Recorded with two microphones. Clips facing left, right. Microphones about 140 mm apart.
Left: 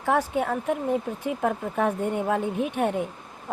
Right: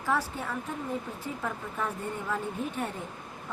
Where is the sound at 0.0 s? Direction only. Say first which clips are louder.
Left 7 dB; 60° left (ahead or behind).